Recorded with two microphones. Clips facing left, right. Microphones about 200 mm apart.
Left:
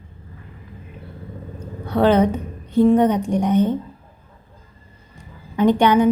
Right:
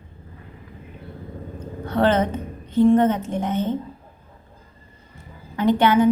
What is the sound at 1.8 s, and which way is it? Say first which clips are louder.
A woman's voice: left 4 dB; 10° left (ahead or behind).